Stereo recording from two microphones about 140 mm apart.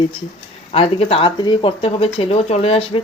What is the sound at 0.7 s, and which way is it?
Speech, 45° left (ahead or behind).